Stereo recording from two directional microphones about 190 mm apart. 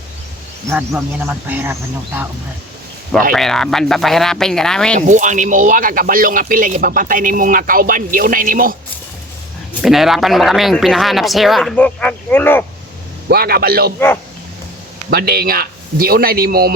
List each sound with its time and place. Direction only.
0.7 s speech: 5° right (ahead or behind)
3.3 s speech: centre (ahead or behind)
4.9 s speech: 40° right (ahead or behind)
9.8 s speech: centre (ahead or behind)
13.2 s speech: 55° right (ahead or behind)
15.1 s speech: 55° right (ahead or behind)